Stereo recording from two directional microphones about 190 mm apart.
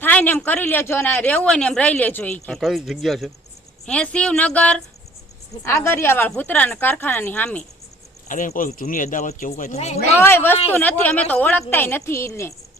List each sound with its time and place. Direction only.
0.0 s speech: 10° left (ahead or behind)
8.3 s speech: 45° left (ahead or behind)
10.2 s speech: 10° left (ahead or behind)